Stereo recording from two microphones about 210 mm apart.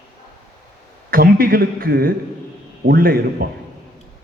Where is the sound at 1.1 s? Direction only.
45° right (ahead or behind).